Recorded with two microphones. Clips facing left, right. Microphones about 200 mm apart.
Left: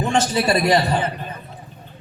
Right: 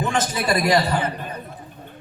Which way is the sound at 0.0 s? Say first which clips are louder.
Left 4 dB; 30° left (ahead or behind).